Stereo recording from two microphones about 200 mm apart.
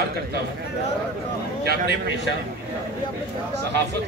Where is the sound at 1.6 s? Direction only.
50° right (ahead or behind).